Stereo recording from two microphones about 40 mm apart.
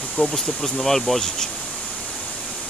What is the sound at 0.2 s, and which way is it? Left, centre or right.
Speech, left.